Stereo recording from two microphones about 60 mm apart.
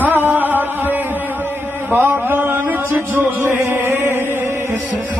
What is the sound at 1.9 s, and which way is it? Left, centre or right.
Speech, right.